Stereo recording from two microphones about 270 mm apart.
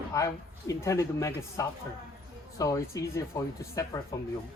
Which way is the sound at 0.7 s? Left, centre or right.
Centre.